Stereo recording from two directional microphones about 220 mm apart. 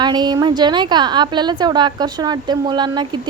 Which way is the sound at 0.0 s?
20° right (ahead or behind).